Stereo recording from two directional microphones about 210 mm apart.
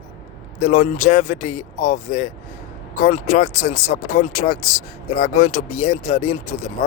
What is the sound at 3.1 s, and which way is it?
Speech, 40° left (ahead or behind).